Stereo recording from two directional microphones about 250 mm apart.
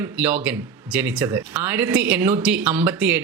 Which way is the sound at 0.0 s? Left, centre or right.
Centre.